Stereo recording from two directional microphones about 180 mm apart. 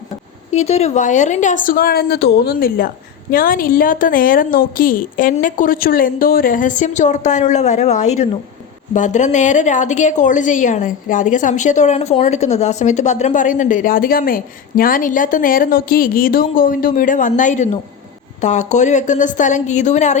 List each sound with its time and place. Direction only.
0.5 s a woman's voice: 35° left (ahead or behind)